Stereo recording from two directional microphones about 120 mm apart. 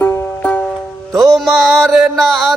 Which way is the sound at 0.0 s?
15° left (ahead or behind).